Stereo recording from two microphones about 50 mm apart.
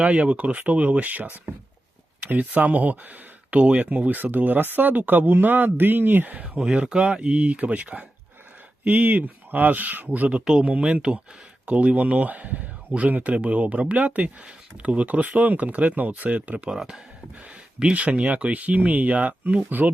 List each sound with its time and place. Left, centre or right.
0.0 s speech: right
6.6 s speech: centre
17.7 s speech: right